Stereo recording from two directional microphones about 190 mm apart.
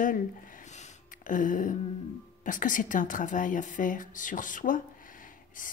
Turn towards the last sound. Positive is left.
turn(degrees=45)  # may be behind; listen again after turning